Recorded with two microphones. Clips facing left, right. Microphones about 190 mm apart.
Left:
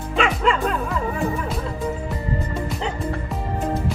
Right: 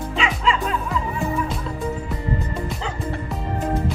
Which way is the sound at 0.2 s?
50° left (ahead or behind).